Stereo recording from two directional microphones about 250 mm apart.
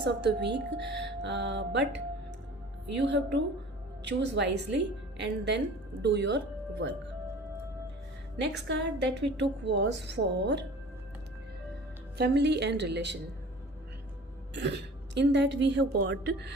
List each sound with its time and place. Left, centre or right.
0.0 s a woman's voice: right
8.4 s a woman's voice: right
12.1 s a woman's voice: right
14.5 s a woman's voice: right